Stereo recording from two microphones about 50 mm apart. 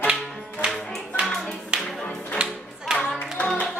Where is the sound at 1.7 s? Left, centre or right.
Right.